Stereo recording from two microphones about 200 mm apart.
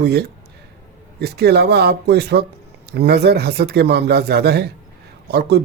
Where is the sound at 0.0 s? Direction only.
55° right (ahead or behind).